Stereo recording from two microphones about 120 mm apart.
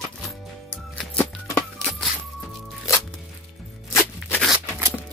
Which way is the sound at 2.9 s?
25° left (ahead or behind).